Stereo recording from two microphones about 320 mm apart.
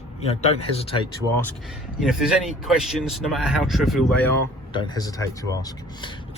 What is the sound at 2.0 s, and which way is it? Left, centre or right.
Speech, centre.